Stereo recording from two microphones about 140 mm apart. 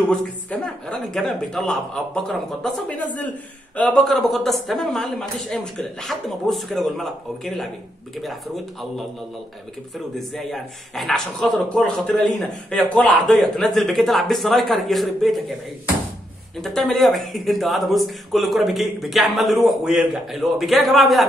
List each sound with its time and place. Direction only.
0.1 s speech: 5° left (ahead or behind)
10.1 s speech: centre (ahead or behind)
16.6 s speech: centre (ahead or behind)